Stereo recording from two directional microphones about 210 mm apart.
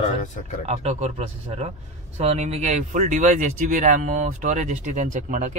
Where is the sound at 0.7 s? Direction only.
30° right (ahead or behind).